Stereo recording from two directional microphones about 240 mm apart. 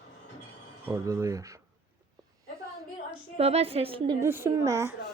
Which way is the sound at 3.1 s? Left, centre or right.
Right.